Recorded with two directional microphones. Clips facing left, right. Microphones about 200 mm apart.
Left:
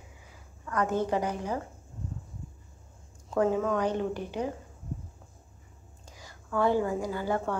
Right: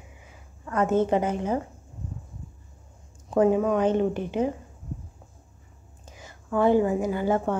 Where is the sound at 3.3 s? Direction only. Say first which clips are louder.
Right 5 dB; 20° right (ahead or behind).